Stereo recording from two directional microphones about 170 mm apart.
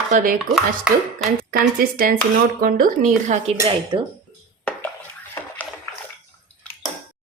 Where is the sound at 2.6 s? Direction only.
55° right (ahead or behind).